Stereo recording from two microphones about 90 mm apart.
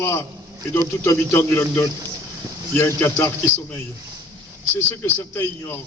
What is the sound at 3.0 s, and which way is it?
Speech, 25° left (ahead or behind).